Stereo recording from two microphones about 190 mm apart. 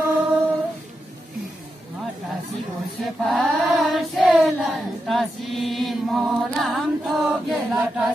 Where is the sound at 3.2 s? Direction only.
Centre (ahead or behind).